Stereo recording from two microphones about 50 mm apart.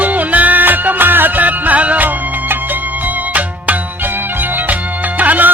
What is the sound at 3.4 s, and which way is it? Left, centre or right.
Music, right.